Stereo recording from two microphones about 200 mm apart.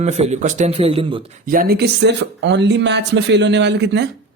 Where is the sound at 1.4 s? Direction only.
45° right (ahead or behind).